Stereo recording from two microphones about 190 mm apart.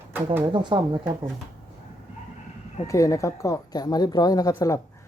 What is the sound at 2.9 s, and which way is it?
Speech, 15° left (ahead or behind).